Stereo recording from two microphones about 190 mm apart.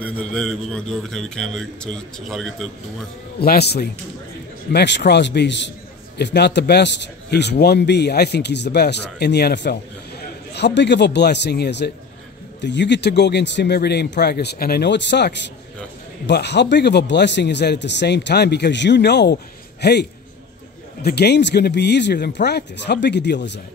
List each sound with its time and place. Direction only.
0.0 s a man's voice: 5° left (ahead or behind)
3.3 s a man's voice: 55° left (ahead or behind)